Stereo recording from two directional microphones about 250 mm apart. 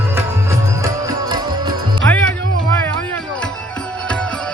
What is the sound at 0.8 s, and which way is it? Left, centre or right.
Music, centre.